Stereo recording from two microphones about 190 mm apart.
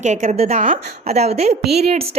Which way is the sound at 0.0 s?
40° right (ahead or behind).